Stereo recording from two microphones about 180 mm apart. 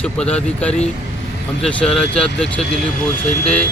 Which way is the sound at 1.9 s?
35° left (ahead or behind).